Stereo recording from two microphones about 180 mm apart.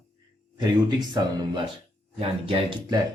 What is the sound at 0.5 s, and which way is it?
Speech, 25° right (ahead or behind).